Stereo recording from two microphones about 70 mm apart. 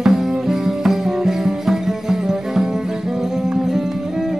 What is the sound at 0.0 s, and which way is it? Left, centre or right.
Music, centre.